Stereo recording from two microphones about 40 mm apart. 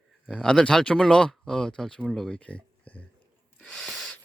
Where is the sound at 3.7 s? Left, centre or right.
Left.